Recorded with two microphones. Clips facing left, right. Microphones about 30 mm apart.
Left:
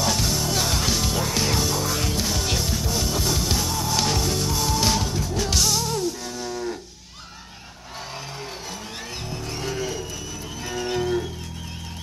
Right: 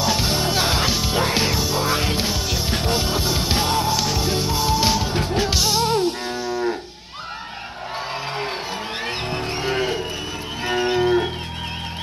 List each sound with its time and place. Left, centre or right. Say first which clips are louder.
0.0 s music: right 3 dB; right
1.5 s music: right 1 dB; centre
1.8 s music: right 4 dB; right
2.3 s music: right 1 dB; centre
2.7 s music: right 4 dB; right
3.9 s music: right 1 dB; centre
4.2 s music: right 3 dB; right
5.1 s music: right 5 dB; right
5.5 s music: right 2 dB; right
5.8 s music: right 6 dB; right
9.0 s music: right 8 dB; right
10.6 s livestock: right 7 dB; right